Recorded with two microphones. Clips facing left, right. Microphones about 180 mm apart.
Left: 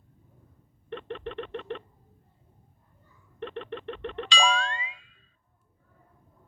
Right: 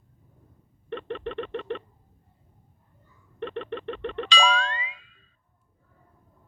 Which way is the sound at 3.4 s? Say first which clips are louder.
Right 3 dB; 90° right.